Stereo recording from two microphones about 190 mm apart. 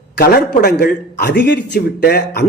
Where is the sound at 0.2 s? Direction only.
55° left (ahead or behind).